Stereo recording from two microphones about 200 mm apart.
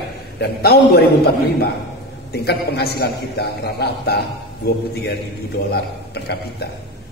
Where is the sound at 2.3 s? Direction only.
55° left (ahead or behind).